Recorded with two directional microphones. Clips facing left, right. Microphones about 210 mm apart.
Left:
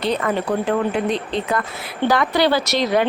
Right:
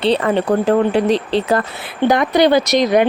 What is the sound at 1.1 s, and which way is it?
Speech, 90° right.